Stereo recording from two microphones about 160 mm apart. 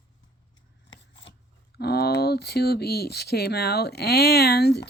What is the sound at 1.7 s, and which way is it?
Speech, 85° left.